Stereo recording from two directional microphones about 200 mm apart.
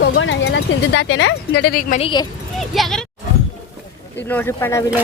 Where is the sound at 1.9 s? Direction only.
25° left (ahead or behind).